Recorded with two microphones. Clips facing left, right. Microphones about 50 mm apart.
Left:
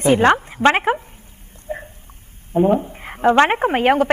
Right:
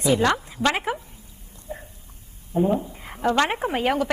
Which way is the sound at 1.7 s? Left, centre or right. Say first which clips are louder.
Left 7 dB; left.